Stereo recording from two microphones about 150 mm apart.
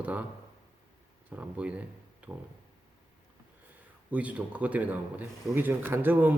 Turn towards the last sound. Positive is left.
turn(degrees=-15)  # may be behind; listen again after turning